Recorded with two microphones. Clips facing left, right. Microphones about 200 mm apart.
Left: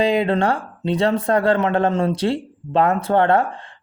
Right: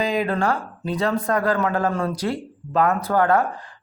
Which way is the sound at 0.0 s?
30° left (ahead or behind).